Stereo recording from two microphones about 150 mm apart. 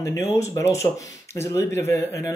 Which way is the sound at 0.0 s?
20° left (ahead or behind).